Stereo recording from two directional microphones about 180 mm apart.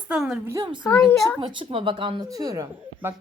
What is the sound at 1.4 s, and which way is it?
Speech, 25° right (ahead or behind).